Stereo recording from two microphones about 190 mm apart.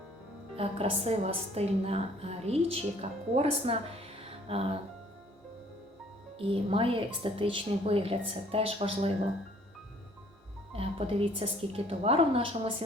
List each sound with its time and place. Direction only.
0.5 s a woman's voice: 30° right (ahead or behind)
6.5 s a woman's voice: 30° right (ahead or behind)
10.7 s a woman's voice: 30° right (ahead or behind)